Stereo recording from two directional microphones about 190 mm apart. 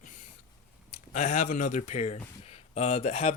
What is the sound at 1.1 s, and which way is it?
Speech, 40° left (ahead or behind).